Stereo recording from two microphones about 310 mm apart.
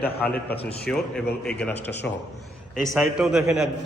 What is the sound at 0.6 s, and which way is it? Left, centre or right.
A man's voice, centre.